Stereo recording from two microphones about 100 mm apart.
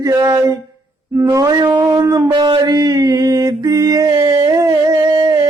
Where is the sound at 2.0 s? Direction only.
30° right (ahead or behind).